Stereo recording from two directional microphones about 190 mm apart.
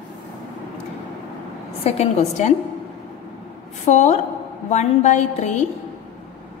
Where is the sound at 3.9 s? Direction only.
35° left (ahead or behind).